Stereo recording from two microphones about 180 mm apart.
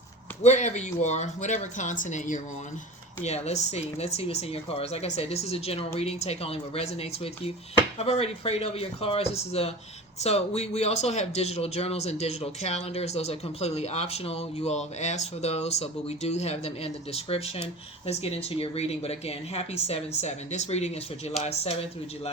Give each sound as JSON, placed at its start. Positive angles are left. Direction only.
{"t": 0.4, "sound": "speech", "side_deg": 40}